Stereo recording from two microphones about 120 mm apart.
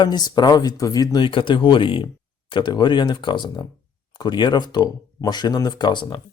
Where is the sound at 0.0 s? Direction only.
35° left (ahead or behind).